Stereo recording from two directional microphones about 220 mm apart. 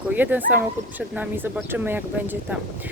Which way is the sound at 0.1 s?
10° right (ahead or behind).